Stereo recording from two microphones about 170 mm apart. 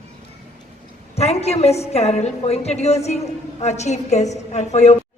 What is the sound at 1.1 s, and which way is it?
A woman's voice, 40° left (ahead or behind).